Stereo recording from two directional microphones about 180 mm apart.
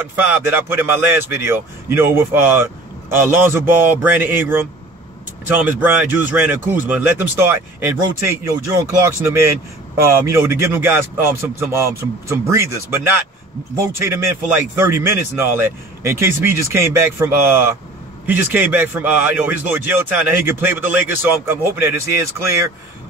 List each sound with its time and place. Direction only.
0.0 s speech: 10° right (ahead or behind)